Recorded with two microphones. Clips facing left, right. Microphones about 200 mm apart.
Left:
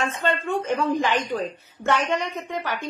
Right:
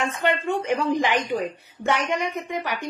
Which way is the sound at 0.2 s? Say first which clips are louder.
Right 3 dB; 15° right (ahead or behind).